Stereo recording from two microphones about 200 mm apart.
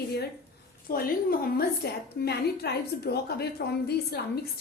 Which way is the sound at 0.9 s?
45° left (ahead or behind).